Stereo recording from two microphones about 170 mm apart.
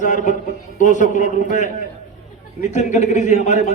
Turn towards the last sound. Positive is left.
turn(degrees=45)  # may be behind; listen again after turning